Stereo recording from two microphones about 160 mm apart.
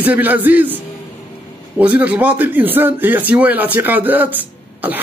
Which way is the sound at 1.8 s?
10° right (ahead or behind).